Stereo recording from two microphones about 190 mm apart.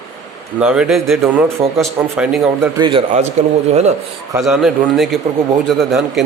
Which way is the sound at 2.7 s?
25° right (ahead or behind).